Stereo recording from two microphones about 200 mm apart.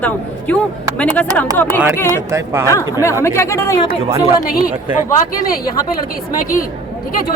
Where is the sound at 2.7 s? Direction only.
15° left (ahead or behind).